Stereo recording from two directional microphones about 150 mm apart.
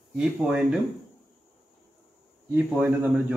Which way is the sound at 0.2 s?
5° right (ahead or behind).